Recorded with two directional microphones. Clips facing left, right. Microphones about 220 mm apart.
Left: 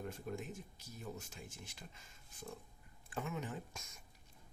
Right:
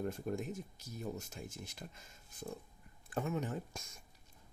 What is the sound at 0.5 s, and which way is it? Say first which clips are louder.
Speech: right 6 dB; 40° right (ahead or behind).